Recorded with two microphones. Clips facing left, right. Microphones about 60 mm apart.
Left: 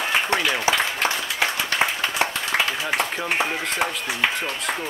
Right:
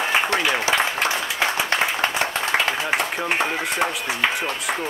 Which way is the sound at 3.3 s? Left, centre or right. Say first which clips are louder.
Right 1 dB; centre.